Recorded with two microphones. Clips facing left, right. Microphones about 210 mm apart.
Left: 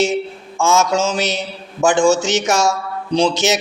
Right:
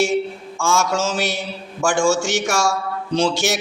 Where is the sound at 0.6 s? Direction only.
20° left (ahead or behind).